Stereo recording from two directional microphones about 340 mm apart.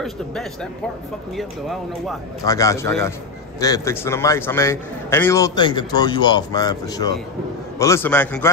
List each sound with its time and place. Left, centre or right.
0.0 s a man's voice: centre